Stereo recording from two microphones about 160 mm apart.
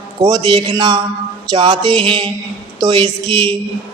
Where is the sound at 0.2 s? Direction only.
25° right (ahead or behind).